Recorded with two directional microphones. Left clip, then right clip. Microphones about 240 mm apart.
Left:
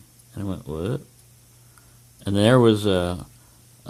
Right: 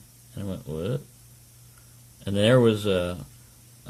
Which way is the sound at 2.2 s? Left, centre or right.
Left.